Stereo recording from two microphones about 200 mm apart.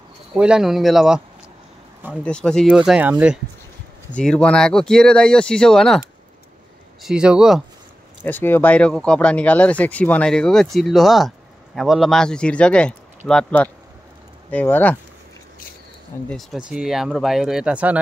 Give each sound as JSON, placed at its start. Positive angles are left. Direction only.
{"t": 0.4, "sound": "speech", "side_deg": -5}
{"t": 2.2, "sound": "speech", "side_deg": 5}
{"t": 4.1, "sound": "speech", "side_deg": 5}
{"t": 8.3, "sound": "speech", "side_deg": 10}
{"t": 16.3, "sound": "speech", "side_deg": 0}